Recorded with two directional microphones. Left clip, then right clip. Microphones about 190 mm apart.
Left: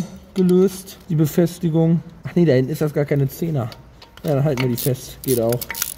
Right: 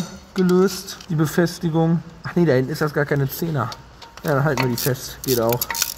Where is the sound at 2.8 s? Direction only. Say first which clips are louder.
Even; 35° left (ahead or behind).